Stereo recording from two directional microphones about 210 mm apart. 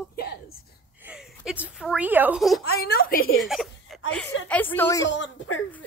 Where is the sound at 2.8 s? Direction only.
45° left (ahead or behind).